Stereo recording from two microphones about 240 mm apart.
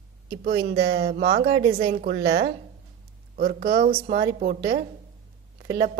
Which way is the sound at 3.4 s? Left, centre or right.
Right.